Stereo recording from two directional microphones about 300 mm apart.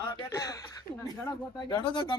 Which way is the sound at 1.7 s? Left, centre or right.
Centre.